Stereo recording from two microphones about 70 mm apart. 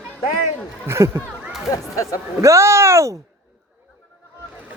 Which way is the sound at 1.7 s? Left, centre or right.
Left.